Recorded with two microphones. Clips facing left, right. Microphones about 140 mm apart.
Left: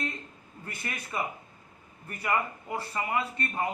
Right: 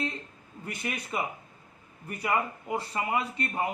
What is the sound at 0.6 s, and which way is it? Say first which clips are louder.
A man's voice: right 4 dB; 15° right (ahead or behind).